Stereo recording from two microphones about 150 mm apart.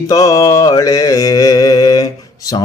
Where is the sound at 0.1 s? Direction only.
20° left (ahead or behind).